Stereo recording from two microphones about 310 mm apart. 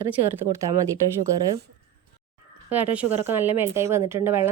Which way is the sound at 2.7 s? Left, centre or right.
Centre.